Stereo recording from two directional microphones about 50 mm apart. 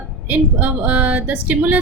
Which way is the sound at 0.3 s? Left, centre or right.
Right.